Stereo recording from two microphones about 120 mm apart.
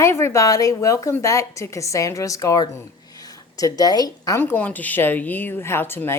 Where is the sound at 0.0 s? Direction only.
20° left (ahead or behind).